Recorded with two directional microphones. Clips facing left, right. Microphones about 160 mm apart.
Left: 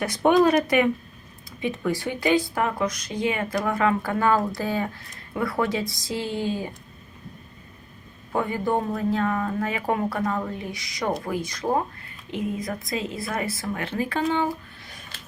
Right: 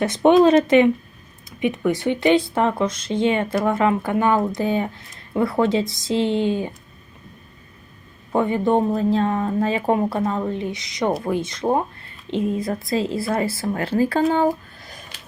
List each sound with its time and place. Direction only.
0.0 s speech: 25° right (ahead or behind)
8.3 s speech: 20° right (ahead or behind); by 14.9 s 40° right (ahead or behind)